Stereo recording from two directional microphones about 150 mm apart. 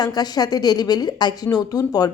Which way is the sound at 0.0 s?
25° left (ahead or behind).